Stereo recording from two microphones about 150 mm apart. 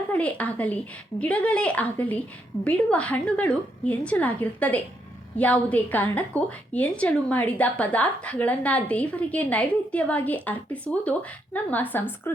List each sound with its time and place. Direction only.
0.1 s a woman's voice: 10° left (ahead or behind)